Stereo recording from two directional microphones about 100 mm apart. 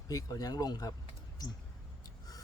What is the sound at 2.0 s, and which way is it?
Snort, 40° left (ahead or behind).